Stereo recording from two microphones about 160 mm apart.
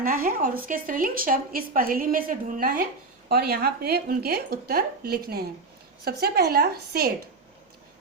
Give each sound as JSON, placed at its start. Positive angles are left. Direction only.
{"t": 0.0, "sound": "a woman's voice", "side_deg": -65}